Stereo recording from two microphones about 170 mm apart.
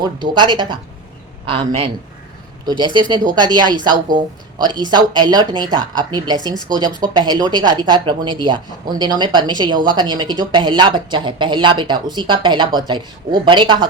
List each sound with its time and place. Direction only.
0.0 s a man's voice: 25° right (ahead or behind)